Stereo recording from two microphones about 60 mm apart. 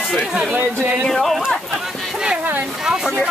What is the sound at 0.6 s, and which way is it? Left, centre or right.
Speech, right.